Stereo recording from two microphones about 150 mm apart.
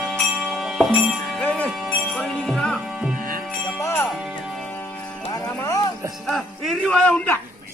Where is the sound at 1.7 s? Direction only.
5° right (ahead or behind).